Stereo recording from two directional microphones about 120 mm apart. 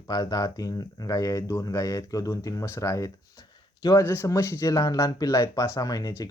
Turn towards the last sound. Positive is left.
turn(degrees=30)  # may be behind; listen again after turning